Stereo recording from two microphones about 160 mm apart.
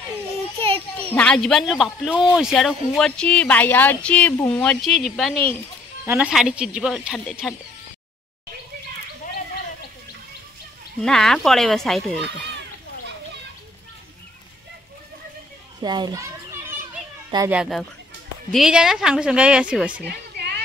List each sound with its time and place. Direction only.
1.1 s a woman's voice: 5° left (ahead or behind)
11.0 s a woman's voice: 5° left (ahead or behind)
15.8 s a child's voice: 25° right (ahead or behind)
17.5 s a woman's voice: 5° right (ahead or behind)
19.9 s a sound: 85° right